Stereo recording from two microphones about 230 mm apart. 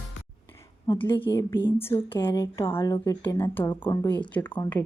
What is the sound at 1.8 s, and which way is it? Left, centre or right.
Speech, centre.